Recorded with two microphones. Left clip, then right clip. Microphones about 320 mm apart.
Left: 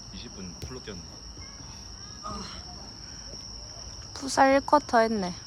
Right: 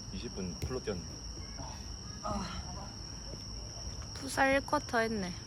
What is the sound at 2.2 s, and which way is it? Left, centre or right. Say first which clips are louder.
Speech: even; centre.